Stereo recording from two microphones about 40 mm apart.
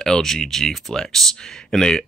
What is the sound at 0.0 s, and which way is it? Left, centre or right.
Speech, centre.